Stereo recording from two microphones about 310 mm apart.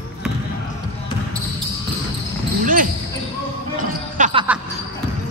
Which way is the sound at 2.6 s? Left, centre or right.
Right.